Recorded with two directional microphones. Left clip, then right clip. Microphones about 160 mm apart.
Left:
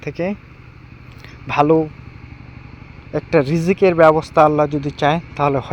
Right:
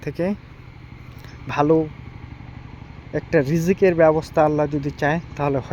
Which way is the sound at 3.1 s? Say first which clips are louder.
Left 3 dB; centre (ahead or behind).